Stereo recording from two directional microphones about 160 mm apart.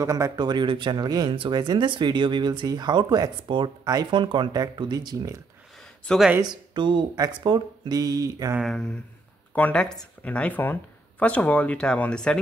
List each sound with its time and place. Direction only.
0.0 s speech: 20° right (ahead or behind)
6.0 s speech: centre (ahead or behind)
6.4 s speech: 30° right (ahead or behind)
8.5 s speech: centre (ahead or behind)